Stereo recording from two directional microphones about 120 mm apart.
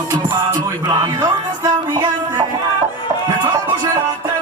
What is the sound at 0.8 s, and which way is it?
Music, 30° right (ahead or behind).